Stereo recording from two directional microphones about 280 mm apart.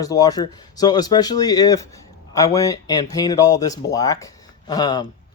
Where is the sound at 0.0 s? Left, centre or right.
Centre.